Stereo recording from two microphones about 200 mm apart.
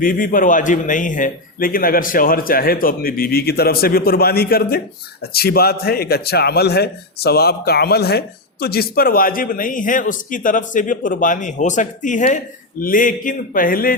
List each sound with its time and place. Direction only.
0.0 s a man's voice: 45° left (ahead or behind)